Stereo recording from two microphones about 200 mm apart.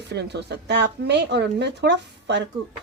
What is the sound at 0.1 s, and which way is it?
Speech, 55° right (ahead or behind).